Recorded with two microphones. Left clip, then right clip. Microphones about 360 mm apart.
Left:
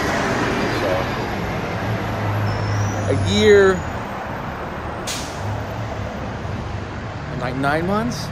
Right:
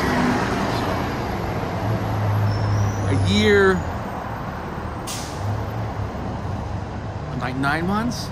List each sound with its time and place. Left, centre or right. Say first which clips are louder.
0.2 s vehicle: left 1 dB; right
3.3 s speech: left 4 dB; centre
7.4 s speech: left 2 dB; centre